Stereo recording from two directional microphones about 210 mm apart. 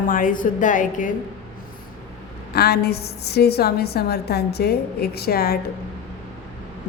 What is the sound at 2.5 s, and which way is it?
A woman's voice, 50° left (ahead or behind).